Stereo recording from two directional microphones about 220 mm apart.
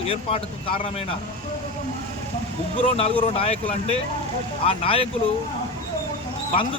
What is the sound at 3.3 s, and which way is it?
Speech, 25° left (ahead or behind).